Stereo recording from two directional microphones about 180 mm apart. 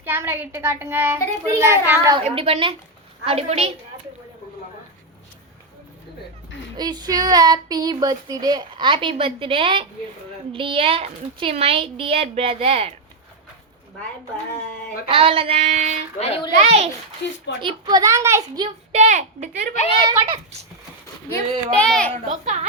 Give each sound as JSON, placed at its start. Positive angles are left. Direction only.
{"t": 0.0, "sound": "a child's voice", "side_deg": -10}
{"t": 2.3, "sound": "a woman's voice", "side_deg": -30}
{"t": 6.7, "sound": "a woman's voice", "side_deg": -25}
{"t": 15.1, "sound": "a woman's voice", "side_deg": -30}
{"t": 16.1, "sound": "a child's voice", "side_deg": 35}
{"t": 16.6, "sound": "a woman's voice", "side_deg": -40}
{"t": 17.2, "sound": "speech", "side_deg": 75}
{"t": 17.6, "sound": "speech", "side_deg": -25}
{"t": 18.9, "sound": "a woman's voice", "side_deg": -40}
{"t": 20.1, "sound": "speech", "side_deg": -30}
{"t": 21.8, "sound": "a child's voice", "side_deg": 5}
{"t": 22.3, "sound": "a woman's voice", "side_deg": -40}